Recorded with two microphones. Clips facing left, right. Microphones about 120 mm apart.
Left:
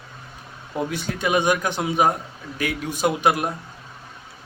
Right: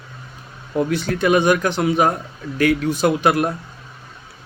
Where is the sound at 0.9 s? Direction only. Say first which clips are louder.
Right 6 dB; 20° left (ahead or behind).